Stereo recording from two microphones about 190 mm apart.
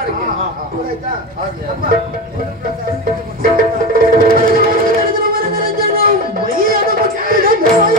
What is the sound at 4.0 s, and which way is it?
Music, 50° right (ahead or behind).